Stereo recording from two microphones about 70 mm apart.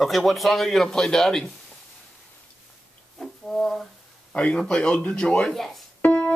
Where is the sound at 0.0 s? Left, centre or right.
Centre.